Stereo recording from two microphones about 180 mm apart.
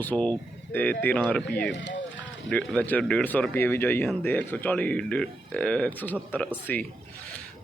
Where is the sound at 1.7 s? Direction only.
85° left.